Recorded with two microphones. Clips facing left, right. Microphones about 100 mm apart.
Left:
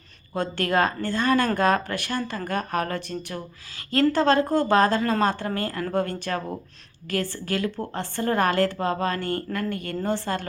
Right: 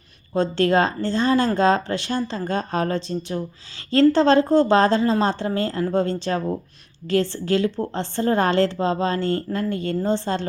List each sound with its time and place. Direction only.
0.3 s a woman's voice: 25° right (ahead or behind)